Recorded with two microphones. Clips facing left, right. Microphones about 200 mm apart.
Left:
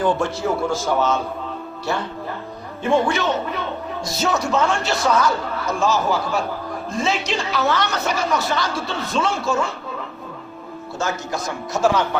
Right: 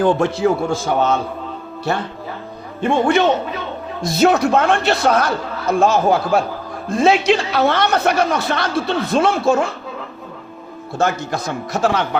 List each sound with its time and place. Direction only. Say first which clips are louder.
0.3 s speech: right 4 dB; 60° right (ahead or behind)
2.8 s speech: right 4 dB; 60° right (ahead or behind)
10.9 s speech: right 6 dB; 60° right (ahead or behind)